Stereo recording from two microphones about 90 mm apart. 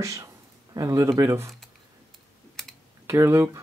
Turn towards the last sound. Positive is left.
turn(degrees=-30)  # may be behind; listen again after turning